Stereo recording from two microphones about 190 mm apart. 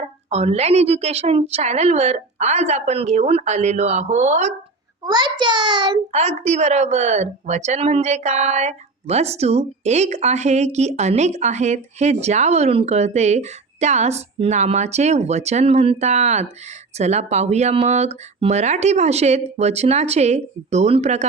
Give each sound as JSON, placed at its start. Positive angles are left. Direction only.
{"t": 0.3, "sound": "a woman's voice", "side_deg": -35}
{"t": 5.0, "sound": "a child's voice", "side_deg": -25}
{"t": 6.1, "sound": "a woman's voice", "side_deg": -35}